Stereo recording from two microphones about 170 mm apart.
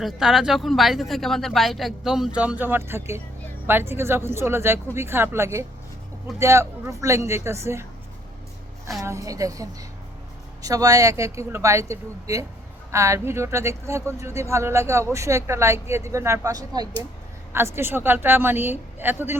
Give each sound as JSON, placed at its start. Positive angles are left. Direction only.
{"t": 0.0, "sound": "speech", "side_deg": 0}
{"t": 9.0, "sound": "speech", "side_deg": -20}